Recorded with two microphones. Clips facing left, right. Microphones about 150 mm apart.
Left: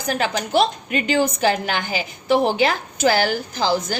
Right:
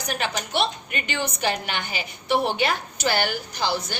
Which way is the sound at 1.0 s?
90° left.